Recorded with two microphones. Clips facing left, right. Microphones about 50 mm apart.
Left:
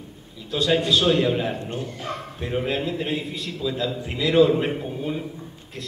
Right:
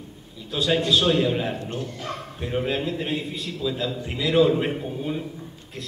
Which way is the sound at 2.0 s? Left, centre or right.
Centre.